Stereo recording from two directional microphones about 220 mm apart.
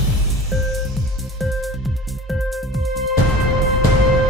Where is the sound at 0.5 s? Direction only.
Centre (ahead or behind).